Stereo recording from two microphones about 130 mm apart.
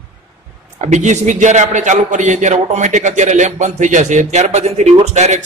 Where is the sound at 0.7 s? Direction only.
65° right (ahead or behind).